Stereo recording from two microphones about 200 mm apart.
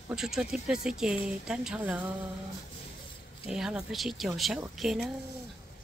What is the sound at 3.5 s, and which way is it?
Speech, 5° right (ahead or behind).